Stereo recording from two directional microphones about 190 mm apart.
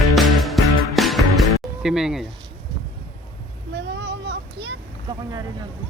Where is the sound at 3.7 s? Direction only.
65° right (ahead or behind).